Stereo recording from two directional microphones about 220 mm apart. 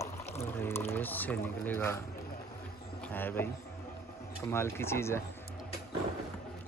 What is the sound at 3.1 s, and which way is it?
Speech, 10° left (ahead or behind).